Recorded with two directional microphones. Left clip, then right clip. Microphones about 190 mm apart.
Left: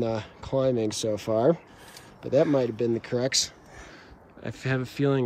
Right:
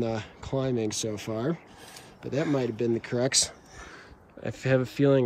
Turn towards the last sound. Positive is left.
turn(degrees=0)  # may be behind; listen again after turning